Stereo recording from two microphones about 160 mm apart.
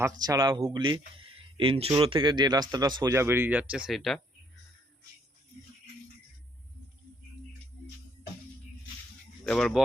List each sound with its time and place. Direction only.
0.0 s speech: 25° right (ahead or behind); by 4.2 s centre (ahead or behind)
9.5 s speech: 5° left (ahead or behind)